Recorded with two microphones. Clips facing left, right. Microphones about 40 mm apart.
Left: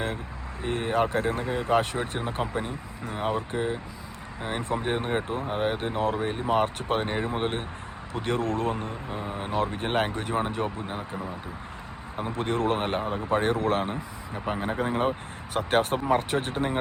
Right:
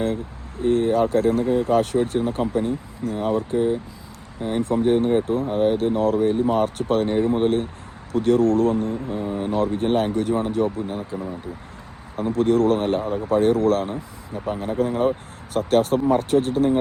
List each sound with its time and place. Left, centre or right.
0.6 s speech: left
12.1 s speech: left